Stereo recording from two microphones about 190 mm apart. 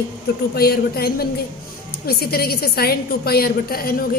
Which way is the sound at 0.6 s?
55° left (ahead or behind).